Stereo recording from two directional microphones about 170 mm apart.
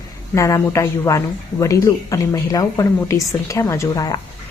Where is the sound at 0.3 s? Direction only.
20° left (ahead or behind).